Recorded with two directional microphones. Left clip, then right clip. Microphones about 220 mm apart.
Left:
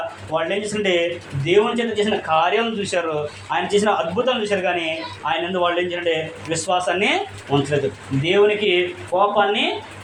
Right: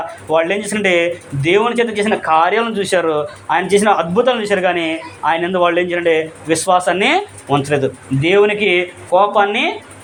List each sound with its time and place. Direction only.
0.3 s speech: 45° right (ahead or behind)
8.2 s speech: 40° right (ahead or behind)